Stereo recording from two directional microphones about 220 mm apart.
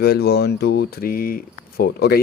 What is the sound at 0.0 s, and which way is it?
Speech, 45° left (ahead or behind).